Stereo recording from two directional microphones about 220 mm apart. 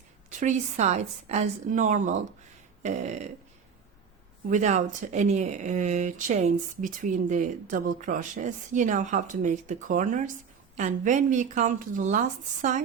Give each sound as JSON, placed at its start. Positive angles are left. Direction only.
{"t": 0.3, "sound": "speech", "side_deg": -35}
{"t": 4.4, "sound": "speech", "side_deg": -35}